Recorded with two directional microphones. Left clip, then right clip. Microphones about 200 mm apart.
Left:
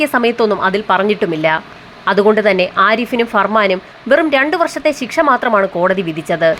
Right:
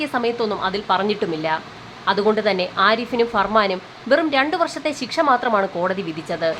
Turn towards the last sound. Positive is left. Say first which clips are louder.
# left 9 dB
turn(degrees=20)  # may be behind; listen again after turning